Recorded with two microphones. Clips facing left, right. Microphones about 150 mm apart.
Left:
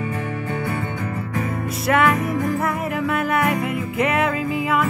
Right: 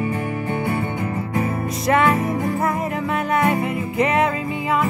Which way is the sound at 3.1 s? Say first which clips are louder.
Right 1 dB; centre (ahead or behind).